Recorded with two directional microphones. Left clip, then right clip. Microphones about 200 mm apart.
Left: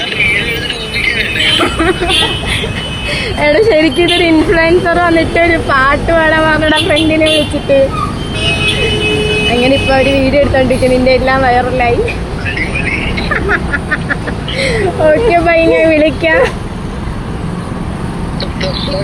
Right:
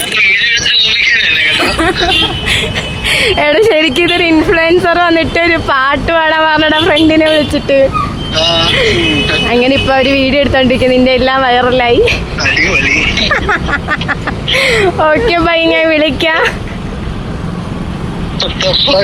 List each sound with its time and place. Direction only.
0.2 s music: 55° right (ahead or behind)
3.1 s a sound: 40° right (ahead or behind)
4.1 s a woman's voice: 20° right (ahead or behind)
4.7 s speech: 35° right (ahead or behind)
9.6 s music: 45° right (ahead or behind)